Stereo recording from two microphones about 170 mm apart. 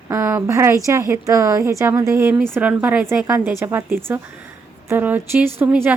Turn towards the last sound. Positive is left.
turn(degrees=-10)  # may be behind; listen again after turning